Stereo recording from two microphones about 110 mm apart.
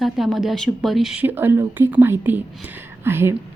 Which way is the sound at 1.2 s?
15° right (ahead or behind).